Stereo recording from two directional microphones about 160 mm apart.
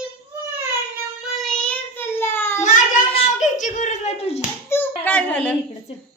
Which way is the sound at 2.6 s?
55° left (ahead or behind).